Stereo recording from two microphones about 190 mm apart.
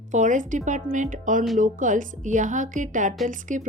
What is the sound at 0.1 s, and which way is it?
A woman's voice, 40° right (ahead or behind).